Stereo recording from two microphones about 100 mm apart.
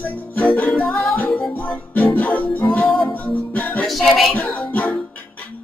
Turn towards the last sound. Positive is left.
turn(degrees=15)  # may be behind; listen again after turning